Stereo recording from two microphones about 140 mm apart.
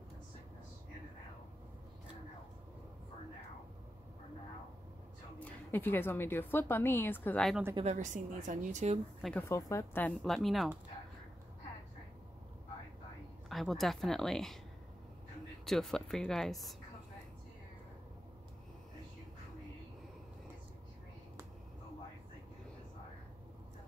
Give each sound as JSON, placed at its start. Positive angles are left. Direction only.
{"t": 5.4, "sound": "a woman's voice", "side_deg": 15}
{"t": 7.8, "sound": "a woman's voice", "side_deg": -60}
{"t": 9.4, "sound": "speech", "side_deg": 20}
{"t": 10.2, "sound": "speech", "side_deg": 0}
{"t": 13.5, "sound": "speech", "side_deg": 0}
{"t": 15.6, "sound": "speech", "side_deg": 0}